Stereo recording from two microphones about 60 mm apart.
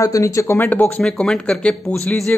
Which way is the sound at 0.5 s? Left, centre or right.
Left.